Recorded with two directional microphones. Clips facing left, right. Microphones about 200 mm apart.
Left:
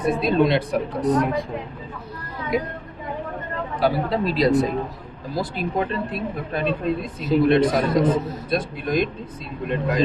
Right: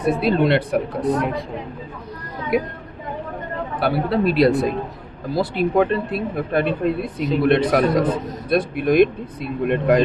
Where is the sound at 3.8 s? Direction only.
65° right (ahead or behind).